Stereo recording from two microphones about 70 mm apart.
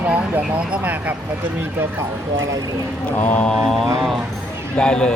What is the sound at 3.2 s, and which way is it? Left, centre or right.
Mantra, left.